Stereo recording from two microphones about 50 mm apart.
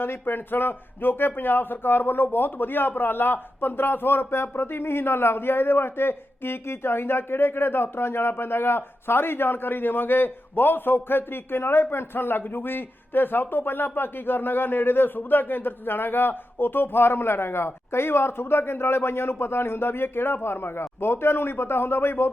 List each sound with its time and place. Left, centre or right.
0.0 s speech: left